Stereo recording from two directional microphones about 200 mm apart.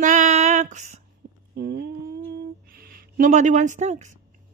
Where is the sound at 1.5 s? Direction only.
50° right (ahead or behind); by 4.1 s 35° right (ahead or behind).